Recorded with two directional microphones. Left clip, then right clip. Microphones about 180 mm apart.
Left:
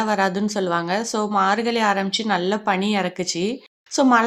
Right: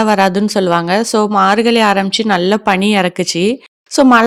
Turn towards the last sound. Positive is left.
turn(degrees=-45)  # may be behind; listen again after turning